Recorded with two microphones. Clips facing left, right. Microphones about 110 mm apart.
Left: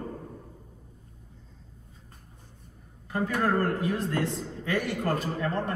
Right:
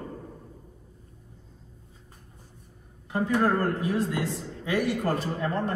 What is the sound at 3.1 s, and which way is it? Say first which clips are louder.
Speech: right 3 dB; 20° right (ahead or behind).